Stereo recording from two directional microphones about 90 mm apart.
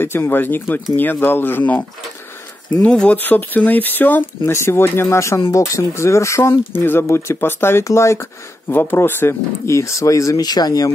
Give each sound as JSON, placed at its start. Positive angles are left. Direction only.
{"t": 0.0, "sound": "speech", "side_deg": 25}